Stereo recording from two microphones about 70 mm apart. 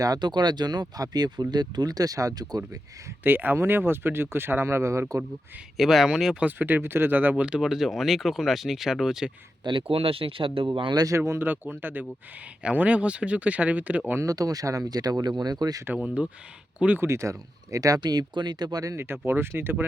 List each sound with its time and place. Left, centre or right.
0.0 s speech: right
3.2 s speech: right
5.7 s speech: centre
6.4 s speech: right
7.4 s speech: centre
9.6 s speech: right
10.7 s speech: right
11.3 s speech: right
14.3 s speech: right
16.0 s speech: centre
17.0 s speech: right
18.0 s speech: right
18.9 s speech: right